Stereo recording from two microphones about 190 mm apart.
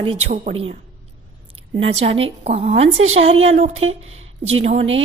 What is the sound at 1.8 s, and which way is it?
A woman's voice, 30° right (ahead or behind).